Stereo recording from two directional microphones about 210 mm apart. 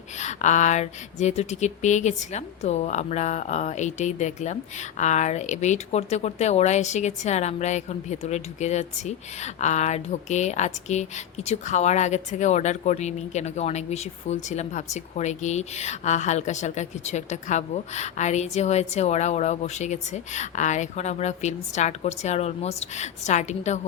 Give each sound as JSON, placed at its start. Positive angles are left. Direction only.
{"t": 0.2, "sound": "speech", "side_deg": 35}